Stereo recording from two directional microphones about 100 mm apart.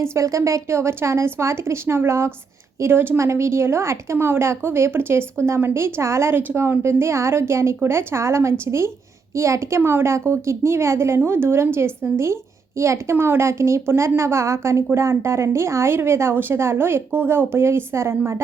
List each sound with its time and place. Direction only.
0.0 s speech: 30° right (ahead or behind)